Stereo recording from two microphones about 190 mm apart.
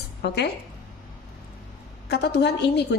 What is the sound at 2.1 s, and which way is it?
Speech, 60° left (ahead or behind).